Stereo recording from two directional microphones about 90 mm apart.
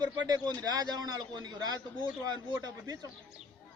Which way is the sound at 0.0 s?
50° right (ahead or behind).